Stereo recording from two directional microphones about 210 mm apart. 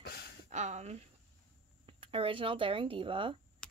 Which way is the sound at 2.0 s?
25° right (ahead or behind).